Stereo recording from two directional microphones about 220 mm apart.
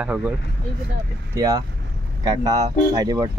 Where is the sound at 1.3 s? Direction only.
15° right (ahead or behind).